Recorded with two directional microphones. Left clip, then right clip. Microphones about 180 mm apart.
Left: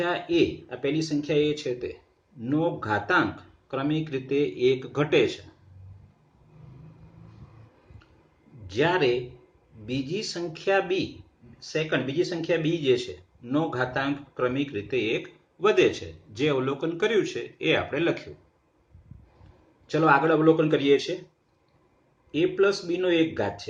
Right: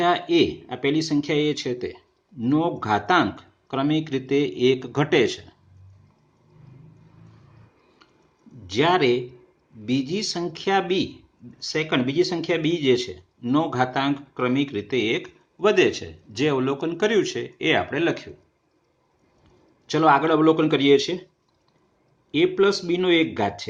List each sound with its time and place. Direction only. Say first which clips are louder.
0.0 s speech: right 5 dB; 55° right (ahead or behind)
8.6 s speech: right 4 dB; 50° right (ahead or behind)
19.9 s speech: right 3 dB; 50° right (ahead or behind)
22.3 s speech: right 3 dB; 60° right (ahead or behind)